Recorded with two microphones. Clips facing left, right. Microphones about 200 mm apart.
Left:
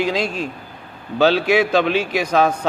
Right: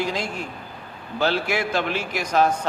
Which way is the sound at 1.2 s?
80° left.